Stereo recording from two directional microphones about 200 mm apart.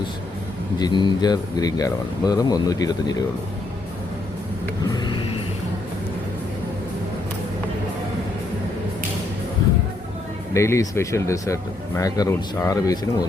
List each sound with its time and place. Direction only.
0.8 s speech: 20° left (ahead or behind)
4.8 s a sound: 20° left (ahead or behind)
10.5 s speech: 15° left (ahead or behind)